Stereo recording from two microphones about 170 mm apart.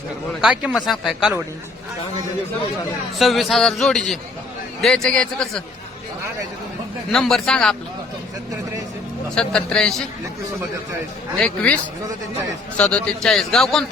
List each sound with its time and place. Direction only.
0.4 s a man's voice: centre (ahead or behind)
3.2 s a man's voice: centre (ahead or behind)
7.1 s a man's voice: centre (ahead or behind)
9.3 s a man's voice: 5° left (ahead or behind)
11.3 s a man's voice: 5° left (ahead or behind)